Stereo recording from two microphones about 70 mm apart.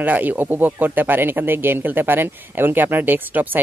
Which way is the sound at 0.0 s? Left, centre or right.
Right.